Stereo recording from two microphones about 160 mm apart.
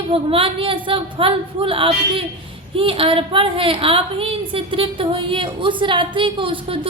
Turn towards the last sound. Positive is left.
turn(degrees=-35)  # may be behind; listen again after turning